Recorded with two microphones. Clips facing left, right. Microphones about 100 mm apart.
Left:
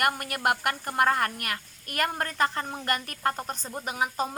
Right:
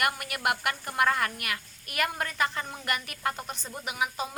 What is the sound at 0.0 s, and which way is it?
A woman's voice, 40° left (ahead or behind).